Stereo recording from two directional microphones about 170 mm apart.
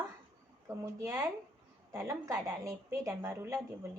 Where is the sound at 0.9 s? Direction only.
20° right (ahead or behind).